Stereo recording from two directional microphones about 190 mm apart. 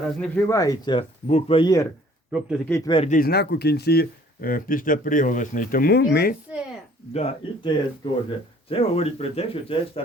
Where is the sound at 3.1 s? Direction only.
55° left (ahead or behind).